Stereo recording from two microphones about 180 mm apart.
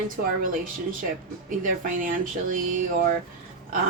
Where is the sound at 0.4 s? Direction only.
50° right (ahead or behind).